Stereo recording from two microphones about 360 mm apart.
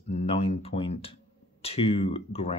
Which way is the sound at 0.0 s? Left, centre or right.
Centre.